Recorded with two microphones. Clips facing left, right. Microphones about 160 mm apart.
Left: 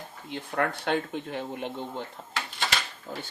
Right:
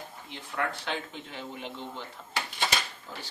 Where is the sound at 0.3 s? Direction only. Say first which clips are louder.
Left 5 dB; 55° left (ahead or behind).